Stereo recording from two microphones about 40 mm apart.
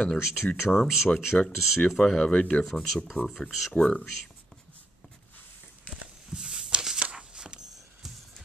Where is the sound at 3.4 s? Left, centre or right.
Left.